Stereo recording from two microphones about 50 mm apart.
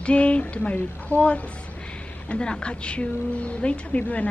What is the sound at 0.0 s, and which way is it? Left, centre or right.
A woman's voice, left.